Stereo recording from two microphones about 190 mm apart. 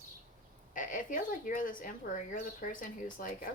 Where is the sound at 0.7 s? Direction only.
45° left (ahead or behind).